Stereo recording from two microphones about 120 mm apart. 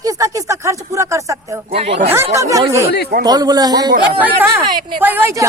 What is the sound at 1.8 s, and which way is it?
Speech, 55° right (ahead or behind).